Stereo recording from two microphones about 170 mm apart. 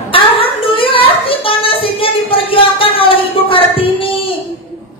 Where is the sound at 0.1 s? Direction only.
30° left (ahead or behind).